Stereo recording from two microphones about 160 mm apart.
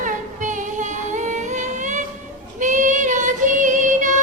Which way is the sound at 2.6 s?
50° right (ahead or behind).